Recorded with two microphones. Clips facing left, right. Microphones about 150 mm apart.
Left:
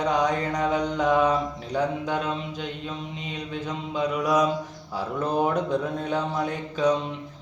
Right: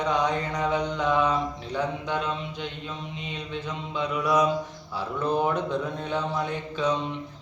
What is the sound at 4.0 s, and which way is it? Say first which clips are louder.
Mantra: left 1 dB; 40° left (ahead or behind).